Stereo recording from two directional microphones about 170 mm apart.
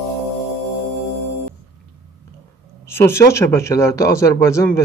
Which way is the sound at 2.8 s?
15° left (ahead or behind).